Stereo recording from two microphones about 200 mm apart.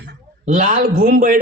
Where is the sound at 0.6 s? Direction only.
35° right (ahead or behind).